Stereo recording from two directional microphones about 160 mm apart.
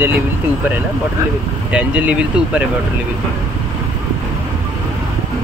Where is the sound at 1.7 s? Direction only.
10° right (ahead or behind).